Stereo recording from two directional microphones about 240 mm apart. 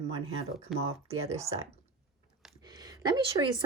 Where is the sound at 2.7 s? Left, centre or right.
Centre.